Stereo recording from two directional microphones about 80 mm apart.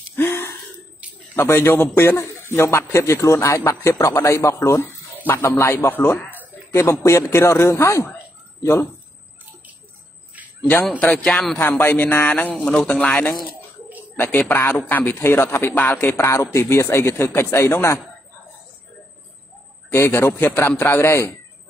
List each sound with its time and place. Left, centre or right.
0.1 s wheeze: left
1.3 s a man's voice: left
11.0 s a man's voice: centre
11.5 s a man's voice: left
12.6 s a man's voice: centre
12.9 s a man's voice: centre; by 18.0 s left
19.9 s a man's voice: left